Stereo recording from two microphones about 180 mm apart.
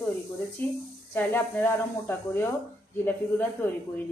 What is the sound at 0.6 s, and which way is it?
Speech, 15° left (ahead or behind).